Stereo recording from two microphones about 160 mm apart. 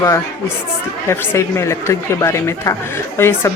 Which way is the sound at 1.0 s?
15° left (ahead or behind).